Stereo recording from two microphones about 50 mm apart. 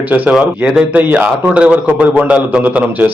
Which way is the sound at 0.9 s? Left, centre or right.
Right.